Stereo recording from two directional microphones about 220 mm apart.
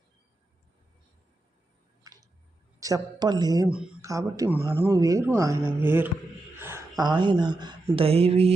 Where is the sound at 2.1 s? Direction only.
15° right (ahead or behind).